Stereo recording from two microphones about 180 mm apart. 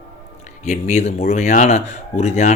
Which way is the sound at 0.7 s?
40° left (ahead or behind).